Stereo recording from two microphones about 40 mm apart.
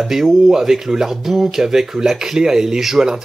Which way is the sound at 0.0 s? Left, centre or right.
Centre.